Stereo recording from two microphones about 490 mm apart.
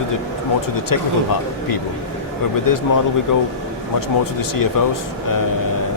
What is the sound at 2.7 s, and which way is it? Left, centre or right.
Speech, left.